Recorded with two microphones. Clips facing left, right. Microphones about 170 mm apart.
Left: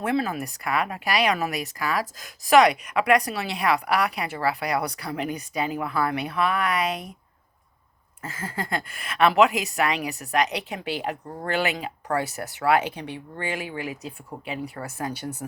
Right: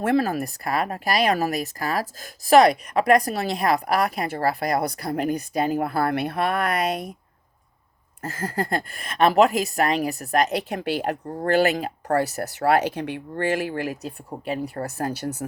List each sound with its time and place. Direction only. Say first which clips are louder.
0.0 s speech: right 4 dB; 45° right (ahead or behind)
8.2 s speech: right 5 dB; 40° right (ahead or behind)